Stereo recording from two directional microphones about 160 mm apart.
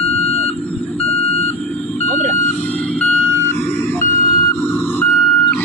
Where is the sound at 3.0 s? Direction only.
5° left (ahead or behind).